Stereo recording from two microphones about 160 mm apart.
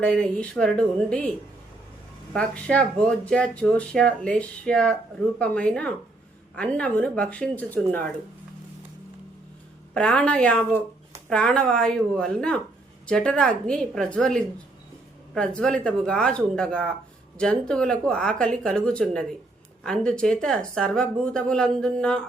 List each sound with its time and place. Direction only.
0.0 s speech: 5° left (ahead or behind)
2.3 s speech: 5° left (ahead or behind)
9.9 s speech: 5° left (ahead or behind)